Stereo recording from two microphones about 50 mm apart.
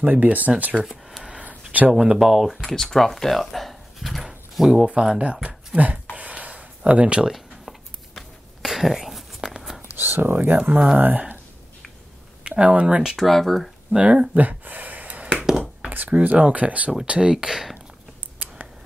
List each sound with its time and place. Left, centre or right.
0.0 s speech: right
0.8 s a sound: centre
1.9 s speech: centre
2.6 s speech: centre
5.2 s speech: right
6.1 s a sound: right
7.2 s a sound: centre
9.8 s speech: right
12.4 s speech: right
13.1 s speech: centre
13.9 s speech: right
14.4 s gasp: right
15.9 s speech: right
17.5 s speech: centre